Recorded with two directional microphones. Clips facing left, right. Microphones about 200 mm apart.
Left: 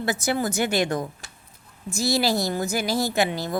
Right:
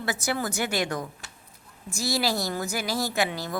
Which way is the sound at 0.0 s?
20° left (ahead or behind).